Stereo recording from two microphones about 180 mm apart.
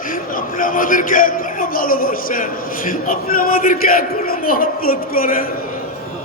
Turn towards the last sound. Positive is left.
turn(degrees=55)  # may be behind; listen again after turning